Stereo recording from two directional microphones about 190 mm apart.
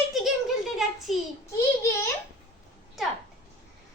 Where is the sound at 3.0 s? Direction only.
Centre (ahead or behind).